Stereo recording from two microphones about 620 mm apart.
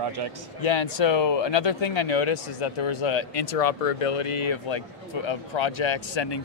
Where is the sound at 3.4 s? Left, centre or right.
Left.